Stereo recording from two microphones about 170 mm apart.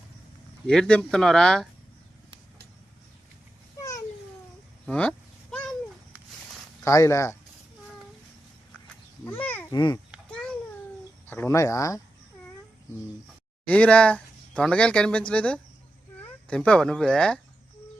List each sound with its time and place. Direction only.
0.7 s speech: 5° left (ahead or behind)
3.8 s babbling: 20° left (ahead or behind)
4.9 s cat: 5° left (ahead or behind)
6.8 s speech: 15° left (ahead or behind)
9.2 s speech: 10° left (ahead or behind)
9.7 s a child's voice: 25° left (ahead or behind)
11.3 s speech: 15° left (ahead or behind)
13.7 s speech: 5° left (ahead or behind)